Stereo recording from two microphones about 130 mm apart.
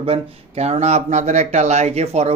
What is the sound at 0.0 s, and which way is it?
Speech, 50° right (ahead or behind).